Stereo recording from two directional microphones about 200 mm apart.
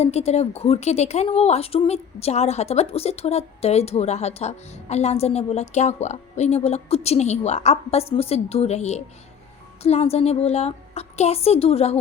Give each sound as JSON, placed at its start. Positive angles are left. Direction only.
{"t": 0.0, "sound": "a woman's voice", "side_deg": 30}